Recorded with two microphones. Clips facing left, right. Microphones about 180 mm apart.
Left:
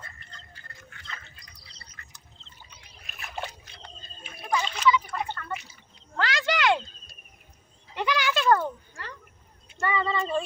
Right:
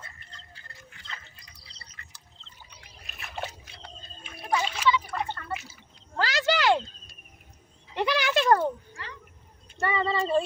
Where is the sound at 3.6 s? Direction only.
5° right (ahead or behind).